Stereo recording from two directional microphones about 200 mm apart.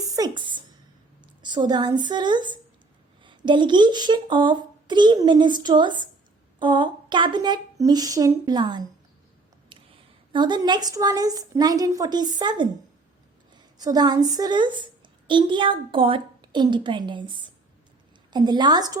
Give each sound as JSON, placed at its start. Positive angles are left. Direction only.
{"t": 0.2, "sound": "a sound", "side_deg": -25}
{"t": 1.4, "sound": "a woman's voice", "side_deg": -20}
{"t": 10.3, "sound": "a woman's voice", "side_deg": -20}
{"t": 18.3, "sound": "speech", "side_deg": -20}